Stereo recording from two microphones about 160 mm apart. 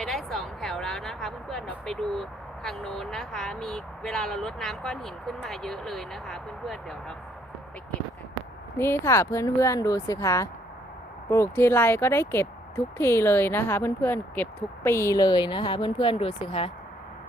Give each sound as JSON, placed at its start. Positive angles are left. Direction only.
{"t": 0.0, "sound": "a sound", "side_deg": 0}
{"t": 2.6, "sound": "speech", "side_deg": 5}
{"t": 8.8, "sound": "a woman's voice", "side_deg": 15}